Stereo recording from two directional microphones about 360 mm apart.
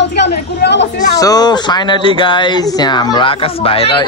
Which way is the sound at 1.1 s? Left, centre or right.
Centre.